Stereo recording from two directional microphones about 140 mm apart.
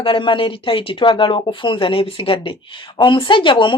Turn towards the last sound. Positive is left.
turn(degrees=35)  # may be behind; listen again after turning